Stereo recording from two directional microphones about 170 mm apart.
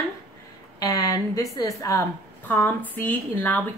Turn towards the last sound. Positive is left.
turn(degrees=10)  # may be behind; listen again after turning